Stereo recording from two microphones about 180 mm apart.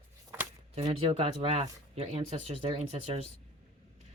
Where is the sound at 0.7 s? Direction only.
30° right (ahead or behind).